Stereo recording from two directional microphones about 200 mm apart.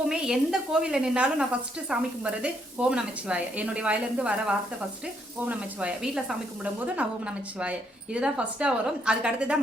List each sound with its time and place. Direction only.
0.1 s a woman's voice: 5° right (ahead or behind)